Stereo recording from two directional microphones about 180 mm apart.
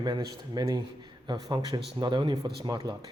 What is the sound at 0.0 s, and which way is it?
A man's voice, 25° right (ahead or behind).